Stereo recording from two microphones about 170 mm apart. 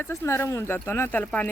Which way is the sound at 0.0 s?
15° left (ahead or behind).